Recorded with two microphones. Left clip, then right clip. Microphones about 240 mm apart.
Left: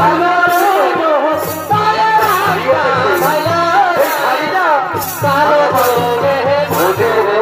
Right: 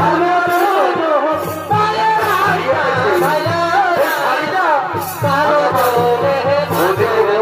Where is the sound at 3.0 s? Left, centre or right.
Left.